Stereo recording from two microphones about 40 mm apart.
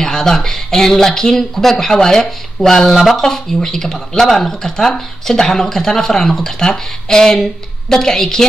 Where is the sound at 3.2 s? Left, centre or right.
Centre.